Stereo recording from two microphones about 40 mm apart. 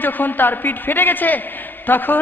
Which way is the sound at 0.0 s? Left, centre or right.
Left.